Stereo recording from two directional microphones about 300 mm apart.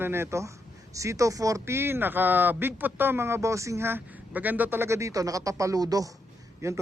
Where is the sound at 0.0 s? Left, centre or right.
Centre.